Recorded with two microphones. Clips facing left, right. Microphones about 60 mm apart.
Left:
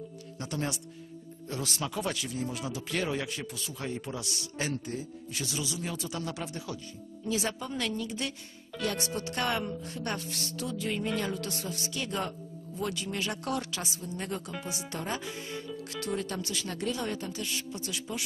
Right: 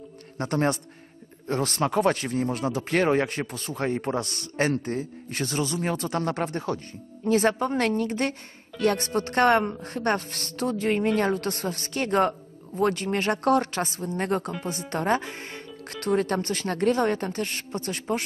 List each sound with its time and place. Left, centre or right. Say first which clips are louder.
0.4 s a woman's voice: right 10 dB; right